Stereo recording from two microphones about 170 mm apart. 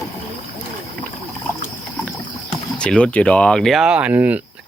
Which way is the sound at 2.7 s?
5° left (ahead or behind).